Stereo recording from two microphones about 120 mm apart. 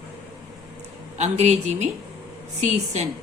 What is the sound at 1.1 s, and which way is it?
Speech, 70° right (ahead or behind).